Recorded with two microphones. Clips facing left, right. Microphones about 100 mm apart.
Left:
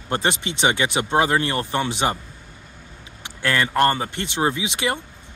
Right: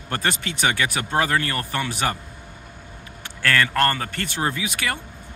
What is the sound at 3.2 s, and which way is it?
Speech, 20° left (ahead or behind).